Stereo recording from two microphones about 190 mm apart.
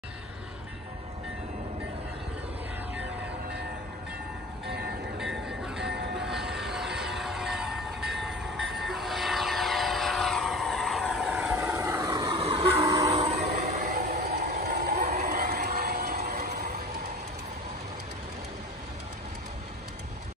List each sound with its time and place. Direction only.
5.2 s music: centre (ahead or behind)
6.1 s vehicle: centre (ahead or behind)
11.8 s vehicle: 20° right (ahead or behind)
12.8 s train: 15° right (ahead or behind)
13.1 s a sound: 35° right (ahead or behind)
13.9 s vehicle: 40° right (ahead or behind)
14.6 s a sound: 60° right (ahead or behind)
15.0 s vehicle: 35° right (ahead or behind)
15.4 s vehicle: 55° right (ahead or behind)